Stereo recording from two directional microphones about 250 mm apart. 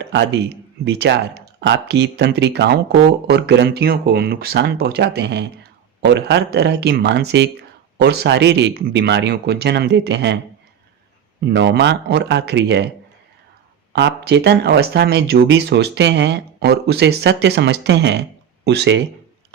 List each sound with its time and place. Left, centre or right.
0.0 s speech: right
11.4 s speech: right
13.9 s speech: right